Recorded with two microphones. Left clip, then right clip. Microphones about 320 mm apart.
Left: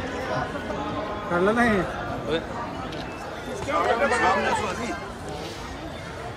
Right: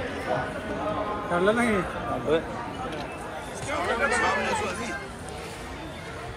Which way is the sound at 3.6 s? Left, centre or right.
Left.